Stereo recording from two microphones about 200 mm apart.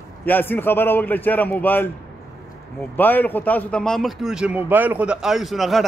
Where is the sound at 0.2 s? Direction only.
10° left (ahead or behind).